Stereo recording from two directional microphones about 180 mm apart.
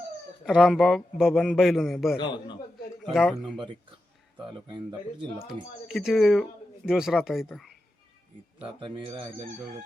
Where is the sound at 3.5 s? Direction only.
25° right (ahead or behind).